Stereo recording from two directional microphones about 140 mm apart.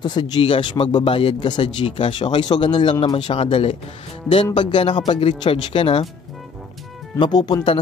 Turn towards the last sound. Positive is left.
turn(degrees=30)  # may be behind; listen again after turning